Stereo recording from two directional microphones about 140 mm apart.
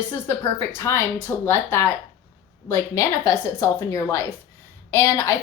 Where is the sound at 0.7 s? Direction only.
20° left (ahead or behind).